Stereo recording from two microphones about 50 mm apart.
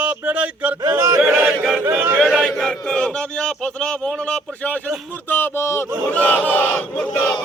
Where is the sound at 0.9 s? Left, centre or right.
Right.